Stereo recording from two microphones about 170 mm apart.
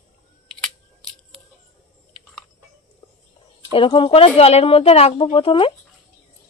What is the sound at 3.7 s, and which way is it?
Speech, 30° left (ahead or behind).